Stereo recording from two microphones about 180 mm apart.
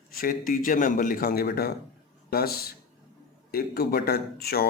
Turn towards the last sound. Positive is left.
turn(degrees=60)  # may be behind; listen again after turning